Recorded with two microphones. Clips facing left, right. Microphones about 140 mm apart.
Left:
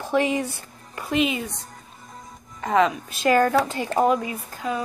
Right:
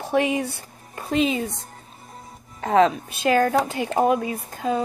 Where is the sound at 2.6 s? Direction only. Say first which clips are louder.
Right 2 dB; 35° right (ahead or behind).